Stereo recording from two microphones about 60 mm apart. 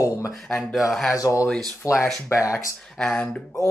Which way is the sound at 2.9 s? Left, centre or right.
Centre.